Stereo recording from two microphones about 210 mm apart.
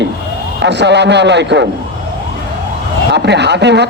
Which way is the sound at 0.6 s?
55° right (ahead or behind).